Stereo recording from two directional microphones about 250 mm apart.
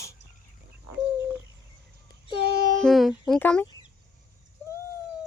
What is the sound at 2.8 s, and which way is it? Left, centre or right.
Speech, centre.